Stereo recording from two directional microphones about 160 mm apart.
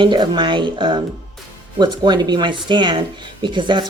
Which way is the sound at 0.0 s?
30° right (ahead or behind).